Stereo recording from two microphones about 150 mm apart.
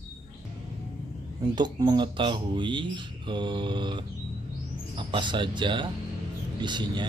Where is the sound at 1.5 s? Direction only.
30° right (ahead or behind).